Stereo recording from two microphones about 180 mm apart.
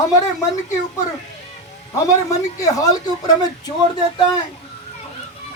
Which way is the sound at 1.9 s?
20° left (ahead or behind).